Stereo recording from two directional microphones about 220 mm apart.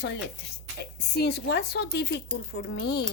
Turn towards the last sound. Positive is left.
turn(degrees=50)  # may be behind; listen again after turning